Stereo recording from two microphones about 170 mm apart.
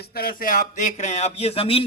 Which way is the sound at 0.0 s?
65° left (ahead or behind).